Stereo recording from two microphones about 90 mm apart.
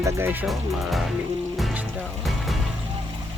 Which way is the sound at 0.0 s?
25° right (ahead or behind).